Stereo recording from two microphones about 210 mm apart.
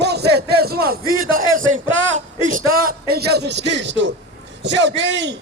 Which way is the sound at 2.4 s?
40° right (ahead or behind).